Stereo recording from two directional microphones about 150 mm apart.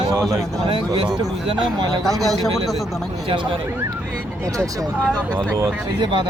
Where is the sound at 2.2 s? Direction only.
Centre (ahead or behind).